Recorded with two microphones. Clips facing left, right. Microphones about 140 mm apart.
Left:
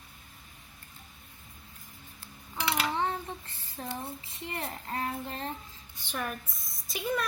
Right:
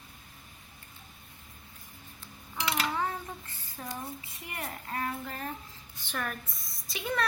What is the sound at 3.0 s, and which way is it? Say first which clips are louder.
Child singing: left 2 dB; 25° left (ahead or behind).